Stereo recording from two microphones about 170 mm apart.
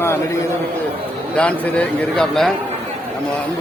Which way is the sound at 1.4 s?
10° left (ahead or behind).